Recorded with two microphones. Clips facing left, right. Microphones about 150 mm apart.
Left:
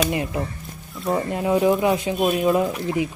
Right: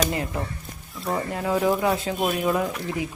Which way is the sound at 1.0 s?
20° left (ahead or behind).